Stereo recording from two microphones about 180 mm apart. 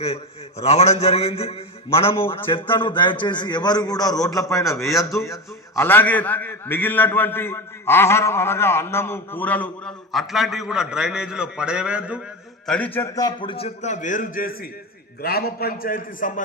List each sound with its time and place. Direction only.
0.0 s a man's voice: 35° left (ahead or behind); by 12.2 s 5° right (ahead or behind)
12.6 s a man's voice: 5° left (ahead or behind); by 16.4 s 50° left (ahead or behind)